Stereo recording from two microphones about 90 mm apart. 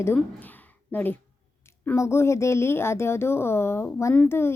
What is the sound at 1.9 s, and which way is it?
Speech, 30° left (ahead or behind).